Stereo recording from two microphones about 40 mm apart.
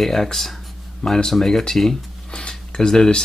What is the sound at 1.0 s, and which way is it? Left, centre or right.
Speech, centre.